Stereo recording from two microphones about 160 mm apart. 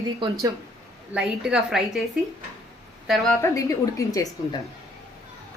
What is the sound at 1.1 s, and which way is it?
Speech, 5° right (ahead or behind).